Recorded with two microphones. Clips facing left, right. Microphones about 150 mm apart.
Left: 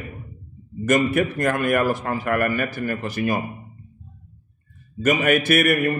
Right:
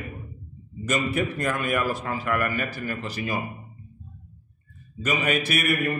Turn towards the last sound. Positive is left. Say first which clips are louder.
# left 6 dB
turn(degrees=55)  # may be behind; listen again after turning